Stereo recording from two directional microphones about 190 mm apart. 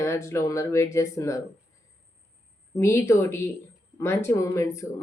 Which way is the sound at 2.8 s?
15° left (ahead or behind).